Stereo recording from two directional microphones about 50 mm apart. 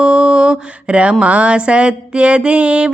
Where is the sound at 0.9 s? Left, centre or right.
Right.